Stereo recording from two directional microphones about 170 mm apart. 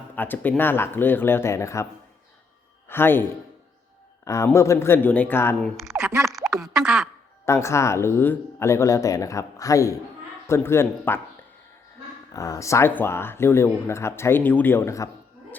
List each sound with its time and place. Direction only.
0.2 s speech: 10° left (ahead or behind)
2.9 s speech: 15° left (ahead or behind)
4.4 s speech: 15° left (ahead or behind)
5.6 s a sound: centre (ahead or behind)
6.6 s a woman's voice: 5° right (ahead or behind)
7.4 s speech: 15° left (ahead or behind)
12.3 s speech: 20° left (ahead or behind)